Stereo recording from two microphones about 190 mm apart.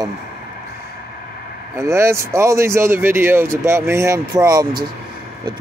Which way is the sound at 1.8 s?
15° right (ahead or behind).